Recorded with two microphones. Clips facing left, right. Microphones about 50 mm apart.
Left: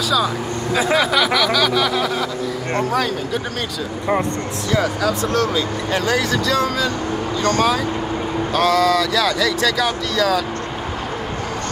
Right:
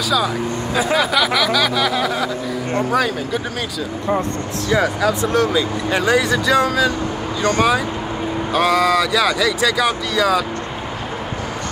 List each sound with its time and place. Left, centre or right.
0.7 s speech: centre
4.7 s speech: centre